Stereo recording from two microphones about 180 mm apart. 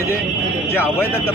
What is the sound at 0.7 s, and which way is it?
Speech, 10° left (ahead or behind).